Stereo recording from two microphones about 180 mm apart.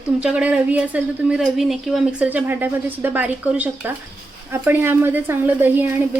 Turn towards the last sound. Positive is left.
turn(degrees=-10)  # may be behind; listen again after turning